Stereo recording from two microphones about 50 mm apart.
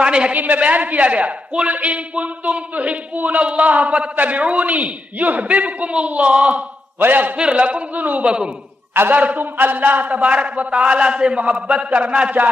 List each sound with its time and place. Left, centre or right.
0.0 s a sound: right
0.4 s a man's voice: right
7.0 s a man's voice: right
7.3 s a man's voice: right
9.1 s a man's voice: right